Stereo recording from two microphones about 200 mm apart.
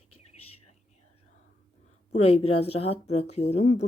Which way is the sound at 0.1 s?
90° left.